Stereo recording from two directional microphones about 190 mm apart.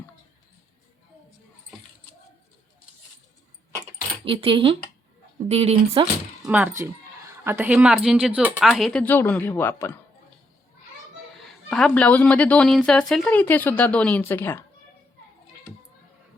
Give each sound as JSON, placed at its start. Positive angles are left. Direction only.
{"t": 4.3, "sound": "speech", "side_deg": -25}
{"t": 6.4, "sound": "speech", "side_deg": -10}
{"t": 11.7, "sound": "speech", "side_deg": 5}